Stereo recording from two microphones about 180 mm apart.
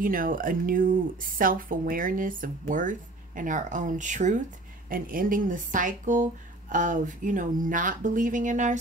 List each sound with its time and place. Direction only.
0.0 s speech: 50° right (ahead or behind)